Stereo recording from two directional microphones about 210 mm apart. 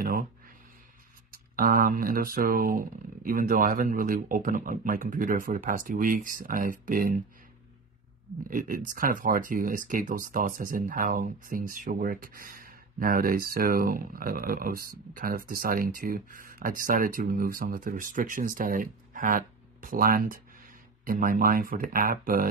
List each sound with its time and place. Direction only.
1.3 s speech: 45° right (ahead or behind)
8.5 s speech: 40° right (ahead or behind)